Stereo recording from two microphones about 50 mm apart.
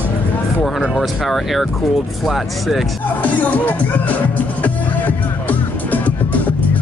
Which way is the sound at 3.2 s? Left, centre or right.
Left.